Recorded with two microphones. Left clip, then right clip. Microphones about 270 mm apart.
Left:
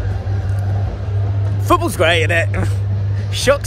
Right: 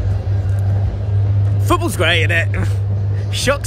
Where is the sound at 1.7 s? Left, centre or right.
Centre.